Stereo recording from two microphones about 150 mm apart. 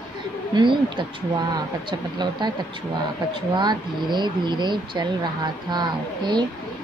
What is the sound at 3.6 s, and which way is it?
A woman's voice, 30° right (ahead or behind).